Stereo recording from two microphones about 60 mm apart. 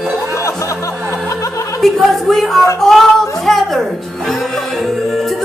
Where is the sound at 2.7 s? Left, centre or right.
Centre.